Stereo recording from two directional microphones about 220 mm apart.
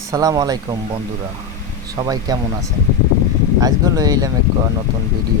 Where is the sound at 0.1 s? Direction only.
15° right (ahead or behind).